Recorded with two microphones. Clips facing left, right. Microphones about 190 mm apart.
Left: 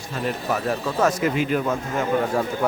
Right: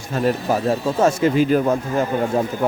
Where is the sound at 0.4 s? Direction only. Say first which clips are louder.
Right 5 dB; 30° right (ahead or behind).